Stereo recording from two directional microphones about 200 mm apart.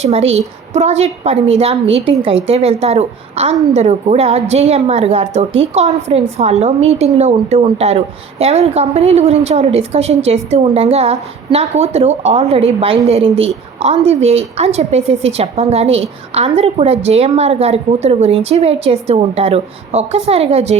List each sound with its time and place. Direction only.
0.1 s a woman's voice: 30° right (ahead or behind)